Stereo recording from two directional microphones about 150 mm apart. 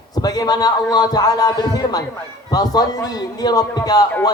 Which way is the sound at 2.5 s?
25° left (ahead or behind).